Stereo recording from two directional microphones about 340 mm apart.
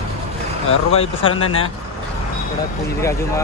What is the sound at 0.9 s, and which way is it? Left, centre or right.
Speech, centre.